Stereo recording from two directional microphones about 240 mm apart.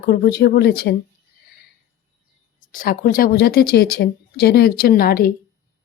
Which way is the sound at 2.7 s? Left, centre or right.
Left.